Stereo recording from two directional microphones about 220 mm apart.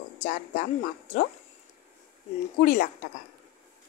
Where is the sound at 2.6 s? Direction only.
40° left (ahead or behind).